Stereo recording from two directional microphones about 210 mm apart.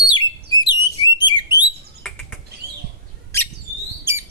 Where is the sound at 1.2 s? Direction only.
20° left (ahead or behind).